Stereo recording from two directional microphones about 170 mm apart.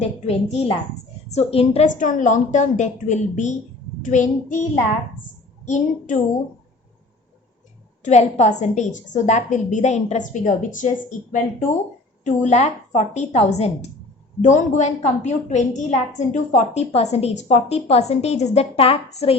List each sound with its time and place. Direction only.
0.3 s a woman's voice: 40° left (ahead or behind)
5.6 s a woman's voice: 45° left (ahead or behind)
8.0 s a woman's voice: 40° left (ahead or behind)